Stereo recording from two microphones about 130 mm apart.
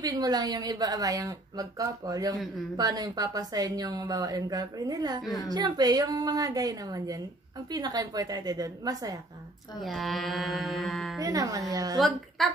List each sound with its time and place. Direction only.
0.0 s speech: 30° right (ahead or behind)
9.8 s speech: centre (ahead or behind)
11.1 s speech: 25° right (ahead or behind)
12.0 s speech: centre (ahead or behind)